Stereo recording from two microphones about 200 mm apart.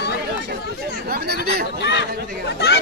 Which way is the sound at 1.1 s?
50° right (ahead or behind).